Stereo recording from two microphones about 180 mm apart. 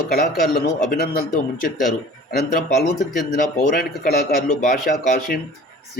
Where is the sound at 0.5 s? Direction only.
55° left (ahead or behind).